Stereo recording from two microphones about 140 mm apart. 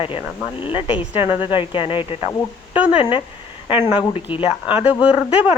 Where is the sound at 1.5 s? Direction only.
40° left (ahead or behind).